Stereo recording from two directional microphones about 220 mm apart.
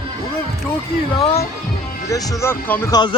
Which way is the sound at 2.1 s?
15° left (ahead or behind).